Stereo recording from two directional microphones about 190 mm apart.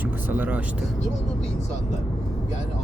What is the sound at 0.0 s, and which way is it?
Speech, 10° right (ahead or behind).